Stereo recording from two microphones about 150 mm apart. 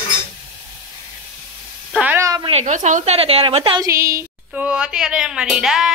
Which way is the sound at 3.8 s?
20° right (ahead or behind).